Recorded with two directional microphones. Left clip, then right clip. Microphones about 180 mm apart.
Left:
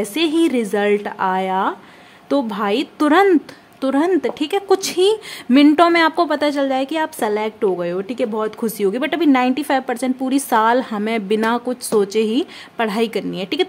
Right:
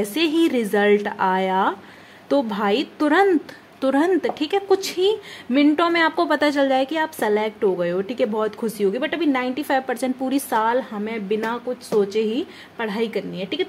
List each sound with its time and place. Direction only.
0.0 s speech: 15° left (ahead or behind)
3.8 s a woman's voice: 10° left (ahead or behind); by 13.7 s 30° left (ahead or behind)